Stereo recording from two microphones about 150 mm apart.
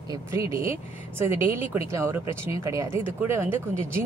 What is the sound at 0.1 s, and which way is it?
A woman's voice, 20° right (ahead or behind).